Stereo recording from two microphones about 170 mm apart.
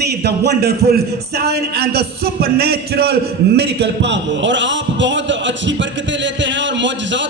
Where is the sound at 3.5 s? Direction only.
80° right.